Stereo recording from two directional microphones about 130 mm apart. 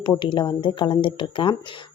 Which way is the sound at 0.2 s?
40° left (ahead or behind).